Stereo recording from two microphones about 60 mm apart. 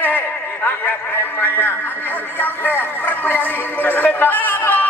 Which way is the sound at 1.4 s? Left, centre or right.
Left.